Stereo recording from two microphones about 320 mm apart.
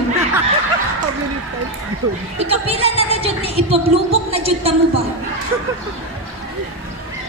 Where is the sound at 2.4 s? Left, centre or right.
Centre.